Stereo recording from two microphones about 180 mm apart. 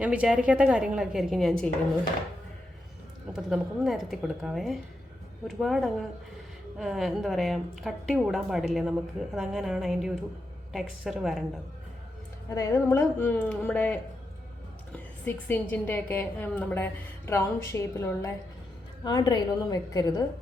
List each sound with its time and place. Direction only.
0.0 s a woman's voice: 5° right (ahead or behind)
3.3 s a woman's voice: centre (ahead or behind)
12.5 s a woman's voice: 15° left (ahead or behind)
15.2 s a woman's voice: 10° left (ahead or behind)